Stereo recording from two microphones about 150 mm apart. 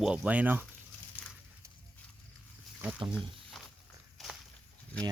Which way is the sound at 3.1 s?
Centre (ahead or behind).